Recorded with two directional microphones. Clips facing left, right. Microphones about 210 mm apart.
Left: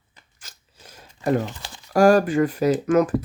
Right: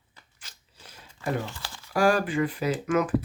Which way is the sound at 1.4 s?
20° left (ahead or behind).